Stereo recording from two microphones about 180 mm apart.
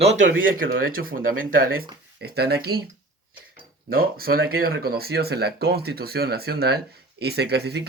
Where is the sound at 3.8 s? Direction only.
55° right (ahead or behind).